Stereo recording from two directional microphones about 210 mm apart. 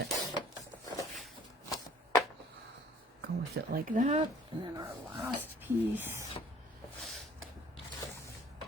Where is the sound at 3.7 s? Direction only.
40° right (ahead or behind); by 5.2 s 20° right (ahead or behind).